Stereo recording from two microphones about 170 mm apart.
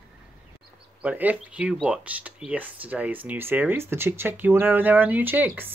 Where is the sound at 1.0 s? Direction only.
10° right (ahead or behind).